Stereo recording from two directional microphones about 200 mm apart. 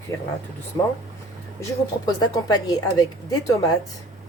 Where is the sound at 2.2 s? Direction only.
20° left (ahead or behind).